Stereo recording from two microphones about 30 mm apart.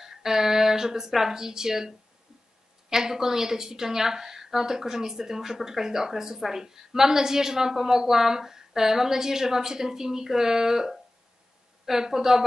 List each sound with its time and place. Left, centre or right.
0.0 s a woman's voice: centre